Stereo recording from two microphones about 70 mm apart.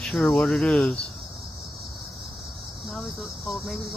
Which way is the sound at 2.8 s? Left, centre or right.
Centre.